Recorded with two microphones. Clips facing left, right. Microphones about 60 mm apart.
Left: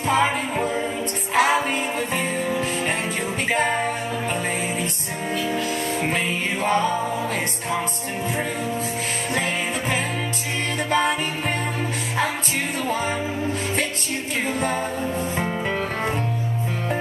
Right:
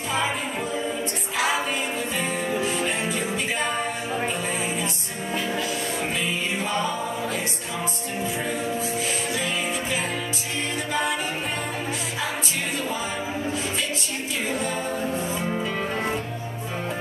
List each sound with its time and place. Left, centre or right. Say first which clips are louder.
0.1 s music: left 6 dB; left
6.0 s music: left 3 dB; left
9.3 s music: left 2 dB; left